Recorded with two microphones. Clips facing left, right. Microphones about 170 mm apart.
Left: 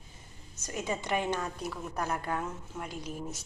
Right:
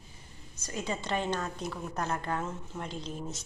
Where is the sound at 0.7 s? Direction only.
20° left (ahead or behind).